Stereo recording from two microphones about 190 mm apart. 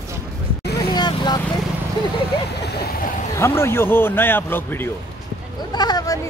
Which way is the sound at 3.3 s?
15° left (ahead or behind).